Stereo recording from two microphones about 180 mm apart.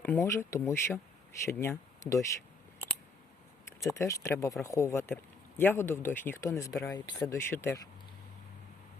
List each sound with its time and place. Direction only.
0.0 s speech: 10° left (ahead or behind)
3.9 s speech: 15° left (ahead or behind)